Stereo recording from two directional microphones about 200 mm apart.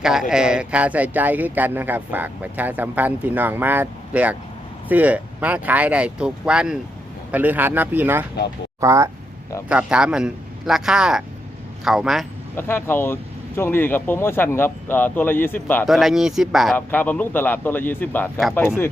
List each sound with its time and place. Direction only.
0.0 s a man's voice: centre (ahead or behind)
12.5 s speech: 10° left (ahead or behind)
15.9 s a man's voice: centre (ahead or behind)
16.7 s speech: 10° left (ahead or behind)